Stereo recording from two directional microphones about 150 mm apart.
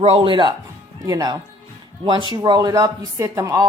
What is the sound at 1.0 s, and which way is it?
Speech, 25° right (ahead or behind).